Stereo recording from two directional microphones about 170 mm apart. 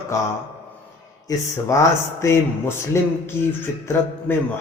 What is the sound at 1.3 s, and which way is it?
A man's voice, 20° left (ahead or behind).